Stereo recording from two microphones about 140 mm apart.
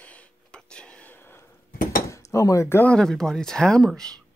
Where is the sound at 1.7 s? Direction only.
90° left.